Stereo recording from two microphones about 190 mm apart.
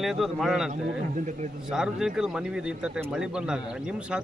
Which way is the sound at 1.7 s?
5° right (ahead or behind).